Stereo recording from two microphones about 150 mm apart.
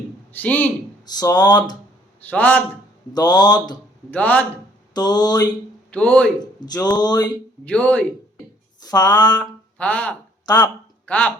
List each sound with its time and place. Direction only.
0.3 s a man's voice: 10° left (ahead or behind)
1.0 s speech: 25° left (ahead or behind)
2.2 s a man's voice: 10° left (ahead or behind)
3.1 s speech: 25° left (ahead or behind)
4.1 s a man's voice: 10° left (ahead or behind)
4.9 s speech: 25° left (ahead or behind)
5.9 s a man's voice: 10° left (ahead or behind)
6.4 s speech: 25° left (ahead or behind)
7.6 s a man's voice: 10° left (ahead or behind)
8.8 s a sound: 25° left (ahead or behind)
9.4 s speech: 10° left (ahead or behind)
10.4 s speech: 25° left (ahead or behind)
11.0 s speech: 10° left (ahead or behind)